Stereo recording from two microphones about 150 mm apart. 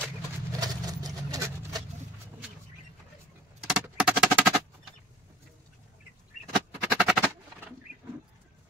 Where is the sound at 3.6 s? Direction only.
5° right (ahead or behind).